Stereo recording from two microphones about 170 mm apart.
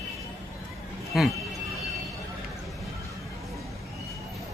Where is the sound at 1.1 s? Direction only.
Centre (ahead or behind).